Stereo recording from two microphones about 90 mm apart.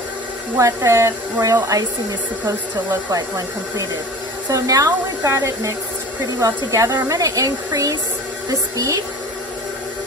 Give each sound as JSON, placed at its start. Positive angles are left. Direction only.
{"t": 0.6, "sound": "speech", "side_deg": -35}
{"t": 3.1, "sound": "speech", "side_deg": -40}